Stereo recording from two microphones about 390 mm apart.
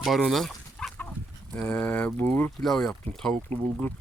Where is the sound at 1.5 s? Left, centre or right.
Centre.